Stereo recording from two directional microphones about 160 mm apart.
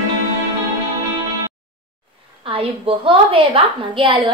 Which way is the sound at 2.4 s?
35° right (ahead or behind).